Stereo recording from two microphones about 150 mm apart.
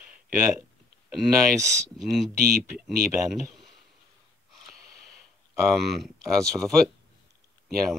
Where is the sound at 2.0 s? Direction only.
Centre (ahead or behind).